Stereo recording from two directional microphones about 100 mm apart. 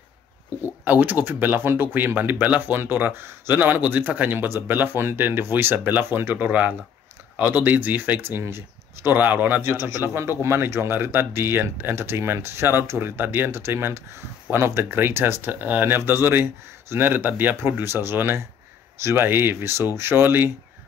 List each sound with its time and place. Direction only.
0.8 s speech: 15° right (ahead or behind)